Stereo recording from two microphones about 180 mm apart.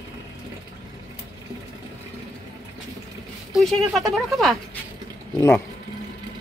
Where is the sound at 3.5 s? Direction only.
Centre (ahead or behind).